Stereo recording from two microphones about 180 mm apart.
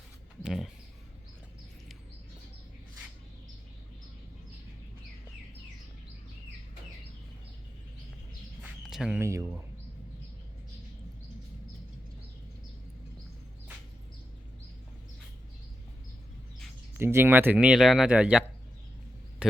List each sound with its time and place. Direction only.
0.4 s speech: centre (ahead or behind)
8.6 s bird: centre (ahead or behind)
9.2 s speech: 15° right (ahead or behind)
17.0 s speech: 15° right (ahead or behind)